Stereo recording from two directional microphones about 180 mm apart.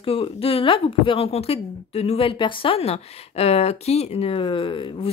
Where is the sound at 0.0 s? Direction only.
30° left (ahead or behind).